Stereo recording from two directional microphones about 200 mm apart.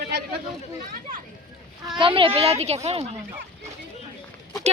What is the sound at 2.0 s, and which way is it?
A child's voice, 25° right (ahead or behind).